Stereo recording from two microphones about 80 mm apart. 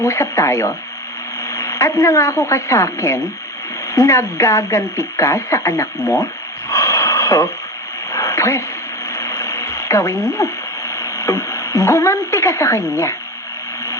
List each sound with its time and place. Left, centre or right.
0.0 s a woman's voice: left
6.7 s a sound: left
9.1 s radio: left